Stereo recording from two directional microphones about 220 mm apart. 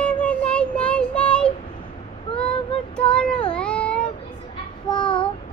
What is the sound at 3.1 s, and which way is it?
Child singing, 5° left (ahead or behind).